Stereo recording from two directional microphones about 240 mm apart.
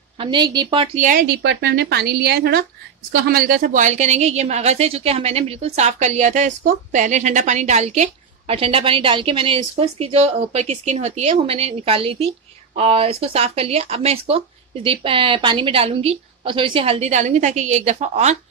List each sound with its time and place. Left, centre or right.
0.2 s a woman's voice: centre
1.4 s a woman's voice: right